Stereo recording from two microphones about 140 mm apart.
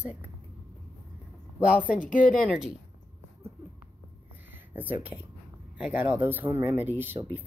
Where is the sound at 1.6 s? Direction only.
10° right (ahead or behind).